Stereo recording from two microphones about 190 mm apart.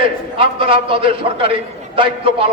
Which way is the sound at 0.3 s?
30° right (ahead or behind).